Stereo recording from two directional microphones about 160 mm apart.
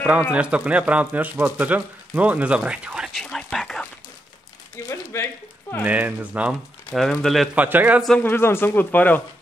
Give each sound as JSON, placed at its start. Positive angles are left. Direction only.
{"t": 0.3, "sound": "speech", "side_deg": -5}
{"t": 3.3, "sound": "a sound", "side_deg": 5}
{"t": 4.8, "sound": "speech", "side_deg": 15}
{"t": 5.9, "sound": "speech", "side_deg": -10}
{"t": 6.9, "sound": "speech", "side_deg": 0}
{"t": 7.5, "sound": "speech", "side_deg": -10}
{"t": 8.0, "sound": "speech", "side_deg": 5}